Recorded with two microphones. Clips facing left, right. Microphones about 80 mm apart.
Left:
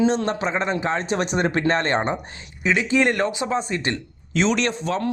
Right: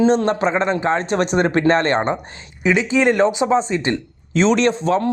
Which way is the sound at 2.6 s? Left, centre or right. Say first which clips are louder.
Right 4 dB; centre.